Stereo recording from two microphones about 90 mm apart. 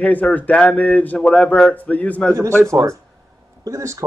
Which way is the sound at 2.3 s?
35° right (ahead or behind).